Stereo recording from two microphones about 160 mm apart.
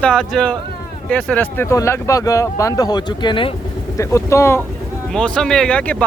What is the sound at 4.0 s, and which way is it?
Speech, 20° left (ahead or behind).